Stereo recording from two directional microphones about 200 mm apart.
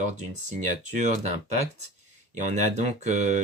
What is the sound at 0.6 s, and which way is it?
Speech, 35° right (ahead or behind).